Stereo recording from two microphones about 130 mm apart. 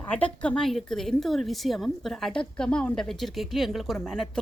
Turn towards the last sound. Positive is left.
turn(degrees=5)  # may be behind; listen again after turning